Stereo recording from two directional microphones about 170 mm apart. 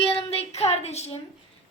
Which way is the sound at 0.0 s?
35° left (ahead or behind).